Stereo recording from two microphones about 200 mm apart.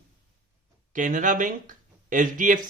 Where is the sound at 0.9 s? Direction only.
40° right (ahead or behind).